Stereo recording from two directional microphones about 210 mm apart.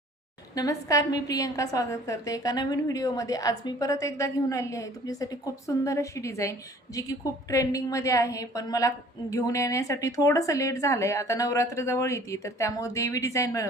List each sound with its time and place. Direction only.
0.5 s a woman's voice: 15° left (ahead or behind)